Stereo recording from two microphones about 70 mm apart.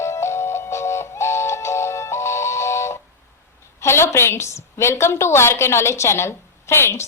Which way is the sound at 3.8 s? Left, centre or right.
Left.